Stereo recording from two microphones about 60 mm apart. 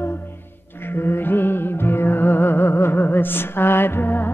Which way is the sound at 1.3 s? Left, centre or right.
Left.